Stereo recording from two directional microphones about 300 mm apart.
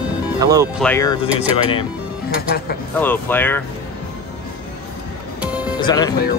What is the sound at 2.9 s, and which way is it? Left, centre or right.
Speech, centre.